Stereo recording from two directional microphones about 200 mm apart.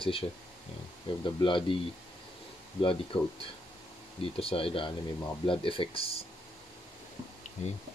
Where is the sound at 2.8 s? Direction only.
25° left (ahead or behind).